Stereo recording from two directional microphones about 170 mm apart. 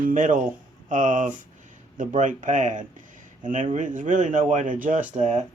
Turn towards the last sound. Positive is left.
turn(degrees=-45)  # may be behind; listen again after turning